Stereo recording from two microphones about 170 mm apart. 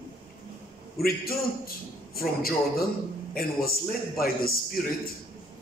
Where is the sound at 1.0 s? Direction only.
60° left (ahead or behind).